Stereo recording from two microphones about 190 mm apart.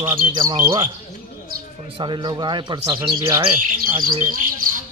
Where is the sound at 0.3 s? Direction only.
20° right (ahead or behind).